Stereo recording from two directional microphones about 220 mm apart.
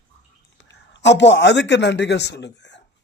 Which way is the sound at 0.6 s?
55° left (ahead or behind).